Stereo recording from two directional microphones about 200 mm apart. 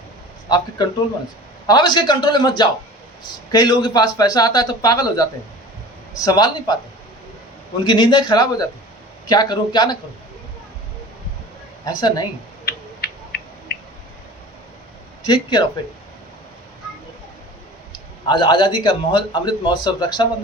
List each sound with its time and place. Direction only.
0.4 s a man's voice: 20° left (ahead or behind)
7.9 s a man's voice: 25° left (ahead or behind)
11.9 s a man's voice: 20° left (ahead or behind)
15.2 s speech: 20° left (ahead or behind)
18.3 s a man's voice: 20° left (ahead or behind)